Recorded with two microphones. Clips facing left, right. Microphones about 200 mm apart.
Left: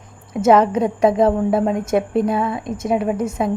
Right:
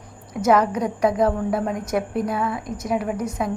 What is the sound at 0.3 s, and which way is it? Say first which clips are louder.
A woman's voice: left 5 dB; 25° left (ahead or behind).